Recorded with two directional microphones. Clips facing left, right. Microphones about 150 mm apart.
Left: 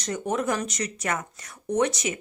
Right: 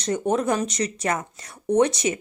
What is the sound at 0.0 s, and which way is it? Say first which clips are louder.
Speech: right 4 dB; 30° right (ahead or behind).